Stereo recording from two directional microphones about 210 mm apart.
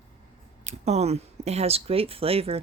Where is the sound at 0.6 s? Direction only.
30° right (ahead or behind).